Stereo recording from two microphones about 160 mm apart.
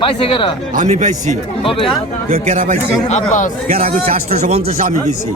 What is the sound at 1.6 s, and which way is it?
Speech, 35° left (ahead or behind).